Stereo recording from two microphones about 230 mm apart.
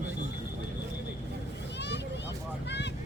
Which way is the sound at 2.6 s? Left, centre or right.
Left.